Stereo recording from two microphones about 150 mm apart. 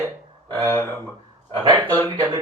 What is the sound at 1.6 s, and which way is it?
Speech, 25° right (ahead or behind).